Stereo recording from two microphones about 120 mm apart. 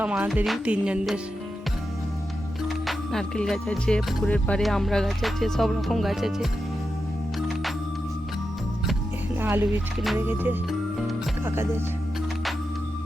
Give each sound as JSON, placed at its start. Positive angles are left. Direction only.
{"t": 0.0, "sound": "music", "side_deg": -10}
{"t": 2.6, "sound": "music", "side_deg": 0}
{"t": 9.4, "sound": "music", "side_deg": -15}
{"t": 11.4, "sound": "speech", "side_deg": -20}